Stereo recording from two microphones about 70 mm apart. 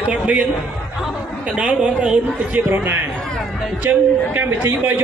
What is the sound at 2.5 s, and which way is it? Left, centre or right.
A man's voice, right.